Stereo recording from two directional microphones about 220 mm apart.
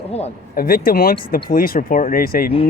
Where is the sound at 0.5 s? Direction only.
40° left (ahead or behind).